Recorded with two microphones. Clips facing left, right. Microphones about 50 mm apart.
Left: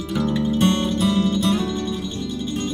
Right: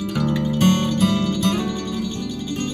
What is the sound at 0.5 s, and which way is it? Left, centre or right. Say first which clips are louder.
Music: right 3 dB; right.